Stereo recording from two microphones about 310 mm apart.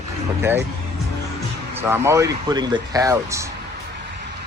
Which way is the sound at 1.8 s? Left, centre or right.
Centre.